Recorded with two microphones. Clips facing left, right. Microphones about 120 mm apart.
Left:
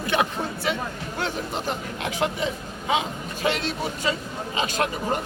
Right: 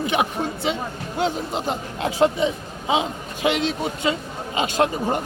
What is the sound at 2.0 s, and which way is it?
Speech, 30° right (ahead or behind).